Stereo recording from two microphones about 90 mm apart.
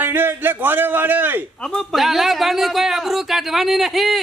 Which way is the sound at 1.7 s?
Centre (ahead or behind).